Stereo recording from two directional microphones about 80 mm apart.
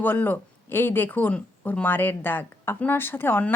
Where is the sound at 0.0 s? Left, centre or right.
Left.